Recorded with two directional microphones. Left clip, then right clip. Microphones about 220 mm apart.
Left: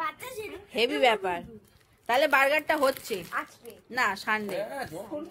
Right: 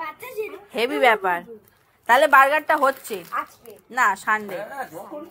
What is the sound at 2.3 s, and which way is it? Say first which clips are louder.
A woman's voice: right 8 dB; 10° left (ahead or behind).